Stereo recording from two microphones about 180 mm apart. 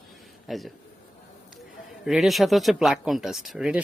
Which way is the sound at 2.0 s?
Centre (ahead or behind).